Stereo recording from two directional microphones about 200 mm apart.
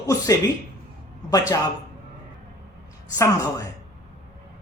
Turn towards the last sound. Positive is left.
turn(degrees=15)  # may be behind; listen again after turning